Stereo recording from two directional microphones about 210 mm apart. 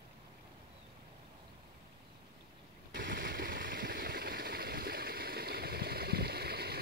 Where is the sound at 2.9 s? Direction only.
55° right (ahead or behind).